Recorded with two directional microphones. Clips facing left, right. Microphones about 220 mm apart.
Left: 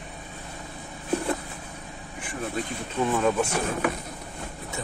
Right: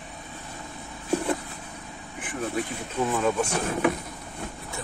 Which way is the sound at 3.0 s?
Centre (ahead or behind).